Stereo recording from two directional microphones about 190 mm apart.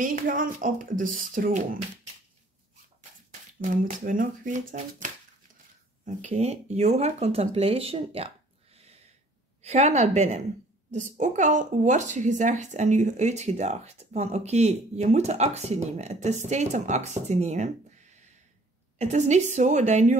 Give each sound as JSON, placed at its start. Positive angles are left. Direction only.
{"t": 0.0, "sound": "speech", "side_deg": -45}
{"t": 3.6, "sound": "speech", "side_deg": -45}
{"t": 9.6, "sound": "speech", "side_deg": -35}
{"t": 18.9, "sound": "speech", "side_deg": -40}